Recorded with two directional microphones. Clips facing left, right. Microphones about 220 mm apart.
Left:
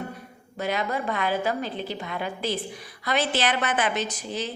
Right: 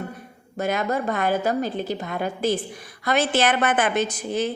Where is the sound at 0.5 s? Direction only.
45° right (ahead or behind).